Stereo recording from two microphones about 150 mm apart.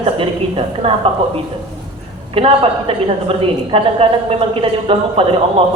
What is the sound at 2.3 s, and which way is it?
A woman's voice, 40° right (ahead or behind).